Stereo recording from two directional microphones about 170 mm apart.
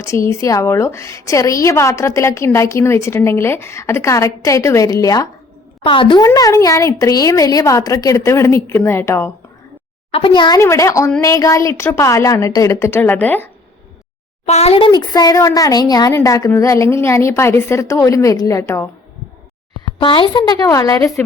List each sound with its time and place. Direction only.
0.0 s a woman's voice: 15° left (ahead or behind)
10.1 s a woman's voice: 30° left (ahead or behind); by 13.5 s 10° left (ahead or behind)
14.4 s speech: 40° left (ahead or behind); by 18.9 s 20° left (ahead or behind)
20.0 s speech: 30° left (ahead or behind)